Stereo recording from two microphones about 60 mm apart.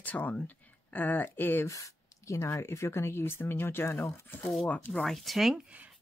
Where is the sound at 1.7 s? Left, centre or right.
Left.